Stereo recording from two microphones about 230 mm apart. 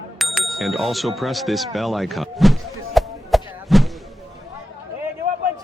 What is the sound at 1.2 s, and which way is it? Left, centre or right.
Slam, centre.